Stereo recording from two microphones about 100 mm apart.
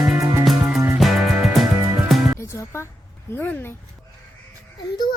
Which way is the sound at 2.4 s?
30° left (ahead or behind).